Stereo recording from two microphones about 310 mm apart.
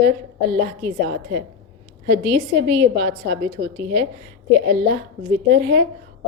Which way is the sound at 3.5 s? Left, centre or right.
Right.